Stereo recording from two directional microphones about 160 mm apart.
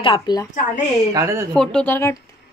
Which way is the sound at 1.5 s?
5° left (ahead or behind).